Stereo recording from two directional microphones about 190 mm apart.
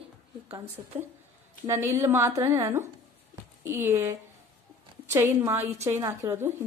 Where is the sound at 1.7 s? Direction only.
15° right (ahead or behind).